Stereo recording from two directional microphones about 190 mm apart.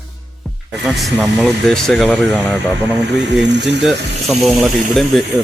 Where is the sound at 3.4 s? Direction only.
65° right (ahead or behind).